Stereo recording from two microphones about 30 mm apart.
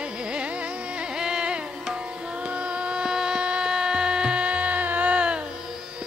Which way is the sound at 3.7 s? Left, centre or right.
Right.